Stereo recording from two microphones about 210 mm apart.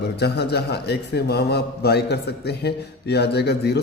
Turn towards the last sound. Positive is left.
turn(degrees=50)  # may be behind; listen again after turning